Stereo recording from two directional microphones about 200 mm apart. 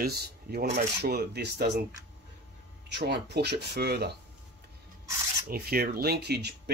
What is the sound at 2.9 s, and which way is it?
Speech, 55° right (ahead or behind).